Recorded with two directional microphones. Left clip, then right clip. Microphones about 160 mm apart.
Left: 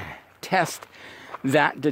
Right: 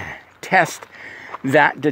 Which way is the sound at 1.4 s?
25° left (ahead or behind).